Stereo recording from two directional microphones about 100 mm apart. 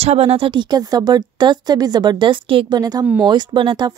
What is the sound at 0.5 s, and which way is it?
Speech, 45° right (ahead or behind).